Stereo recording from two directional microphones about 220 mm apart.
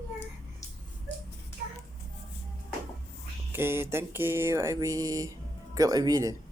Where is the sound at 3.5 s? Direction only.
10° right (ahead or behind).